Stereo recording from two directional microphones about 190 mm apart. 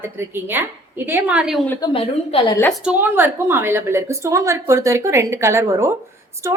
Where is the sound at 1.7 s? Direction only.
20° left (ahead or behind).